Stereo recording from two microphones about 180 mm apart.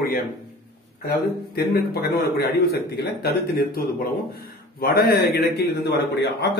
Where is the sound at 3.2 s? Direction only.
60° left (ahead or behind).